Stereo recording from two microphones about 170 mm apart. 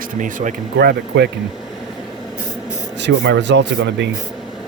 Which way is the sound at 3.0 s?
90° right.